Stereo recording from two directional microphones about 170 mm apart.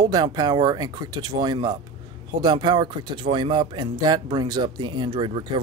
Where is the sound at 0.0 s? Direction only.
25° right (ahead or behind).